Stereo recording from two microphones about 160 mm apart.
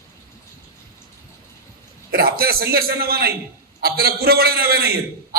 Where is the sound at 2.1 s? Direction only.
75° right (ahead or behind).